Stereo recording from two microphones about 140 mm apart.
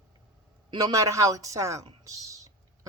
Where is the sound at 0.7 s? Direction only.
30° right (ahead or behind).